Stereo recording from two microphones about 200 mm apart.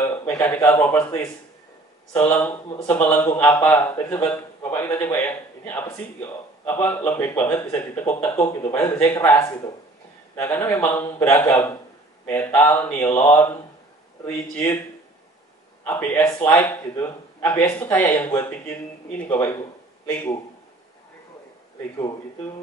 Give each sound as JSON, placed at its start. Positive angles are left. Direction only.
{"t": 0.4, "sound": "speech", "side_deg": 10}
{"t": 15.8, "sound": "speech", "side_deg": 10}
{"t": 21.9, "sound": "speech", "side_deg": 15}